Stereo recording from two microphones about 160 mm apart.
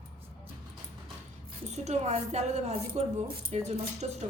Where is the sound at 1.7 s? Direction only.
45° right (ahead or behind).